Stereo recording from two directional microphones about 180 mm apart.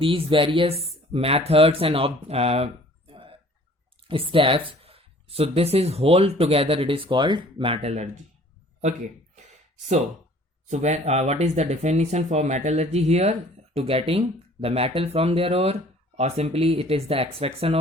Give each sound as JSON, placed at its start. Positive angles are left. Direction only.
{"t": 0.0, "sound": "speech", "side_deg": -30}
{"t": 3.1, "sound": "a sound", "side_deg": -30}
{"t": 4.1, "sound": "speech", "side_deg": -30}
{"t": 10.7, "sound": "speech", "side_deg": -40}